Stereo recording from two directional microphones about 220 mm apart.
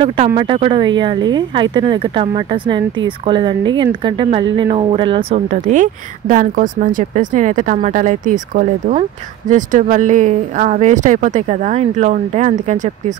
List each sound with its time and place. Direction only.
0.0 s a woman's voice: 25° right (ahead or behind)